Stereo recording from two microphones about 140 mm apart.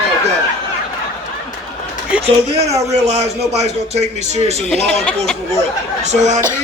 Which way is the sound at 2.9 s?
50° right (ahead or behind).